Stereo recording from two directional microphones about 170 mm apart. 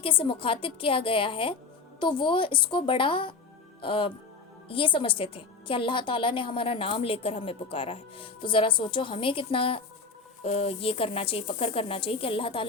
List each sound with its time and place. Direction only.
0.0 s a woman's voice: 30° left (ahead or behind)